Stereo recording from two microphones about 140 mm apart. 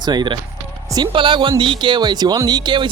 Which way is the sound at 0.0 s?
30° right (ahead or behind).